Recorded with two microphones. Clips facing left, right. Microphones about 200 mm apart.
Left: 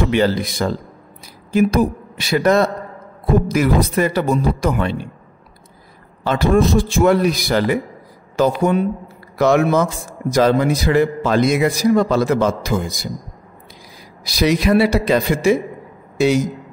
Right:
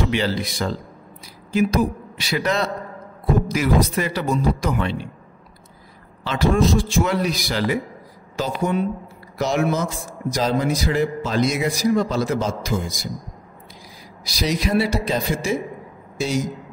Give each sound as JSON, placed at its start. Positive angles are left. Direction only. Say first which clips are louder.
{"t": 0.1, "sound": "a man's voice", "louder": "left 6 dB", "side_deg": 50}
{"t": 6.2, "sound": "a man's voice", "louder": "left 4 dB", "side_deg": 50}
{"t": 14.2, "sound": "a man's voice", "louder": "left 7 dB", "side_deg": 60}